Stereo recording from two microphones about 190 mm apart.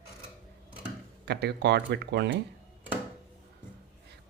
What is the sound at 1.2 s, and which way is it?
Speech, 60° right (ahead or behind).